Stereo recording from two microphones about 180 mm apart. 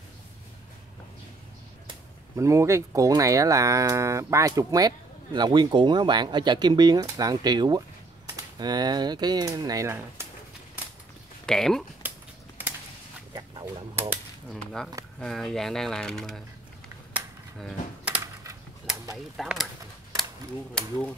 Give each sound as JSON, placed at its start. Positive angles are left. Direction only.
{"t": 2.3, "sound": "speech", "side_deg": -15}
{"t": 11.4, "sound": "speech", "side_deg": 5}
{"t": 13.3, "sound": "a sound", "side_deg": -15}
{"t": 14.5, "sound": "speech", "side_deg": 0}
{"t": 18.0, "sound": "typing", "side_deg": -15}
{"t": 19.1, "sound": "speech", "side_deg": 0}